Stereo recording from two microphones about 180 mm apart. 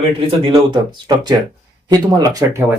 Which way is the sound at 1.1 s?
20° right (ahead or behind).